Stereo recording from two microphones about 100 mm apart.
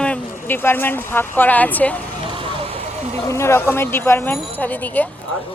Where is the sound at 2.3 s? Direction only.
60° right (ahead or behind); by 3.1 s 90° right.